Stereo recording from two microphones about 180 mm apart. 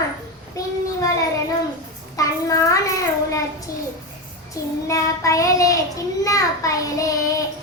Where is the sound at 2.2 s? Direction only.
20° left (ahead or behind).